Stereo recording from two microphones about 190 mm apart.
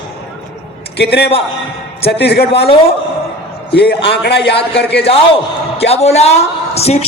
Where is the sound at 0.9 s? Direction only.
60° left (ahead or behind).